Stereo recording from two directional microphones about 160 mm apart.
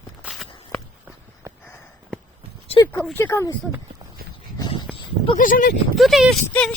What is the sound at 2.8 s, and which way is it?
Speech, 20° left (ahead or behind).